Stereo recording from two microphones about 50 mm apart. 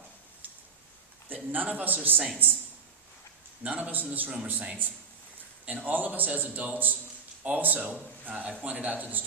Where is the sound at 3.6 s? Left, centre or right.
Right.